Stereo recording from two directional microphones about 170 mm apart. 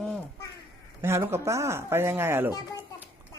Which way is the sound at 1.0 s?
15° right (ahead or behind).